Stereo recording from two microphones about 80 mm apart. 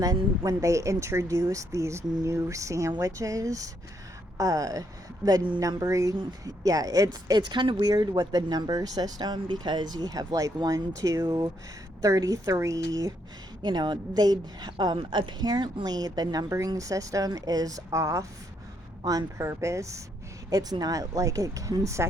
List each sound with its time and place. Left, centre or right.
0.0 s speech: right
7.9 s a woman's voice: right
13.6 s a woman's voice: right
16.5 s speech: right
19.0 s speech: right
19.5 s speech: right
20.5 s speech: right